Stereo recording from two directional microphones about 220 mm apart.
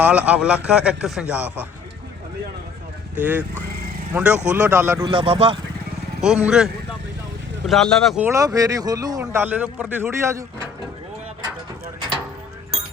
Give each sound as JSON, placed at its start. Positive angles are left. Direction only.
{"t": 0.0, "sound": "a man's voice", "side_deg": -5}
{"t": 3.2, "sound": "a man's voice", "side_deg": -10}
{"t": 6.2, "sound": "a man's voice", "side_deg": -5}
{"t": 7.7, "sound": "speech", "side_deg": 0}